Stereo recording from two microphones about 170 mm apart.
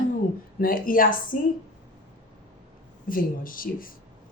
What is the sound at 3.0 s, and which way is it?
Speech, 55° left (ahead or behind).